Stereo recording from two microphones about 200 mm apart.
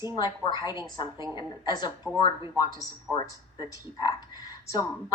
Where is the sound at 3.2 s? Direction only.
20° left (ahead or behind).